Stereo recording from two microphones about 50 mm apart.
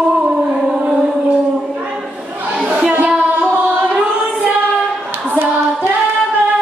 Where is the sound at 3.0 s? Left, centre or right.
Right.